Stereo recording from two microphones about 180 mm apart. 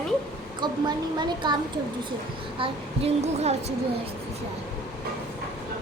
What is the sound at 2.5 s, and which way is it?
A woman's voice, 30° right (ahead or behind).